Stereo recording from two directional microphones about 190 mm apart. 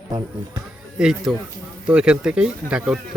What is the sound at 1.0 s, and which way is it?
Speech, 5° right (ahead or behind).